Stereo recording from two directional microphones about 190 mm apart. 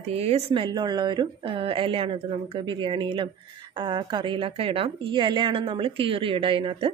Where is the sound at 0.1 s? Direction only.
30° right (ahead or behind).